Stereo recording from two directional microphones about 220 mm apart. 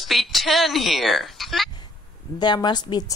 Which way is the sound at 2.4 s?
20° left (ahead or behind).